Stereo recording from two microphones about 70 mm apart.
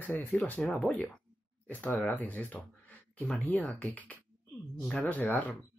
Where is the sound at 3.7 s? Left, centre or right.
Left.